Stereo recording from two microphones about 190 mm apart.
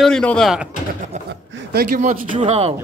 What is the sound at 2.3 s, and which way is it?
Speech, 35° right (ahead or behind).